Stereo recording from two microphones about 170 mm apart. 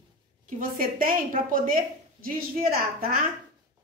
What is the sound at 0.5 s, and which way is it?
A woman's voice, 55° right (ahead or behind).